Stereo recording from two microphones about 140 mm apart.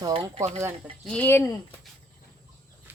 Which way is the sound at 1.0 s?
10° left (ahead or behind).